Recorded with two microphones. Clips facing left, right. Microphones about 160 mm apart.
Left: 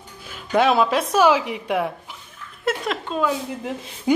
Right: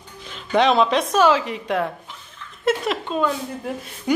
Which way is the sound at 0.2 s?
10° left (ahead or behind).